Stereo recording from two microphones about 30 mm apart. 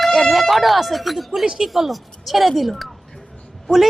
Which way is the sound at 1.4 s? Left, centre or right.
Right.